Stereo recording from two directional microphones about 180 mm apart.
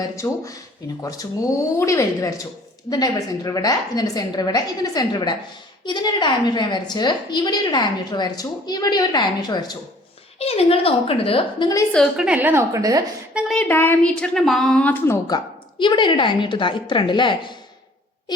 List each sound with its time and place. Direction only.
0.0 s a woman's voice: 20° left (ahead or behind)
10.3 s a woman's voice: 35° left (ahead or behind)
11.9 s a woman's voice: centre (ahead or behind); by 13.1 s 20° right (ahead or behind)
13.3 s a woman's voice: 5° left (ahead or behind)
15.8 s a woman's voice: 25° left (ahead or behind)